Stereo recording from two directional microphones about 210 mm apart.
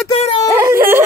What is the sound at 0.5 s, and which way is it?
Speech, 10° right (ahead or behind).